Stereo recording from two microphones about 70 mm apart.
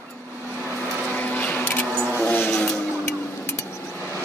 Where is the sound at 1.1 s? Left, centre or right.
Left.